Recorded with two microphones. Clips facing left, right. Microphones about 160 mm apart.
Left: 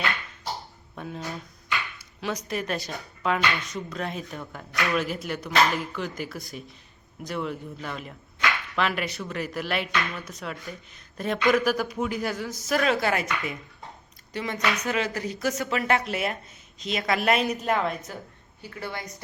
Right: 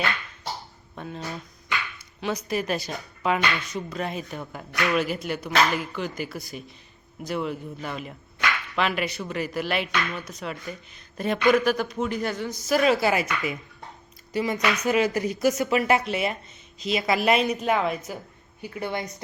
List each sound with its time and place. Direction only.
0.9 s speech: centre (ahead or behind)
18.6 s speech: 15° right (ahead or behind)